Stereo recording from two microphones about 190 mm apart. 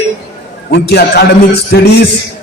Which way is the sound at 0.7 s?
55° left (ahead or behind).